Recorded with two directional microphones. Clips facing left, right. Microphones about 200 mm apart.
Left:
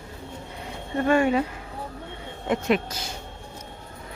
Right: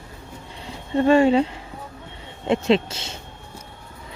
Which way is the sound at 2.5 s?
25° right (ahead or behind).